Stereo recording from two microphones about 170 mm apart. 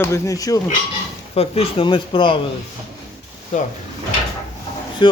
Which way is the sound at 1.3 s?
35° left (ahead or behind).